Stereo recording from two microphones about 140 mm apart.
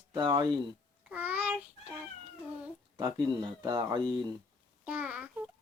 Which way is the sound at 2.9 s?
30° right (ahead or behind).